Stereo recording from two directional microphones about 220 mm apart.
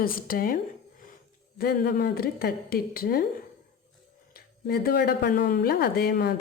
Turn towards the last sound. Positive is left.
turn(degrees=45)  # may be behind; listen again after turning